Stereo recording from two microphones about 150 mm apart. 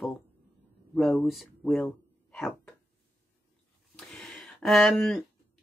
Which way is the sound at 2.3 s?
5° left (ahead or behind).